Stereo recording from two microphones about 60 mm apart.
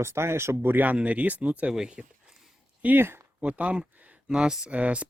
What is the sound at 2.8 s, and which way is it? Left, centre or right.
Speech, right.